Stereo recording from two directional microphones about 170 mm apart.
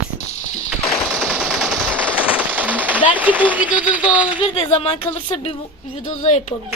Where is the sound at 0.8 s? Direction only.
5° left (ahead or behind).